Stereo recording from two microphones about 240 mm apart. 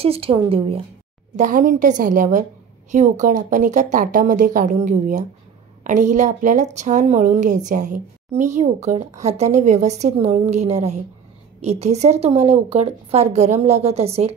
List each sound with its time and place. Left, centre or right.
0.0 s speech: right